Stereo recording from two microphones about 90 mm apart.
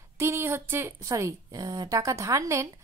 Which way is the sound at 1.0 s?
40° right (ahead or behind).